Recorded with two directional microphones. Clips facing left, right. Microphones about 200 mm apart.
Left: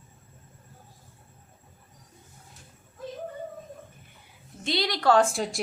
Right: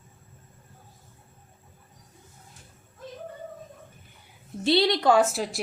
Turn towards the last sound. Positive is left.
turn(degrees=-5)  # may be behind; listen again after turning